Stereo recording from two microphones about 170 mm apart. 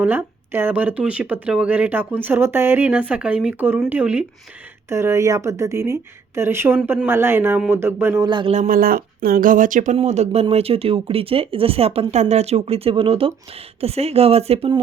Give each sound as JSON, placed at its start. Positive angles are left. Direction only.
{"t": 0.0, "sound": "speech", "side_deg": -10}
{"t": 8.2, "sound": "speech", "side_deg": -25}
{"t": 8.5, "sound": "speech", "side_deg": -50}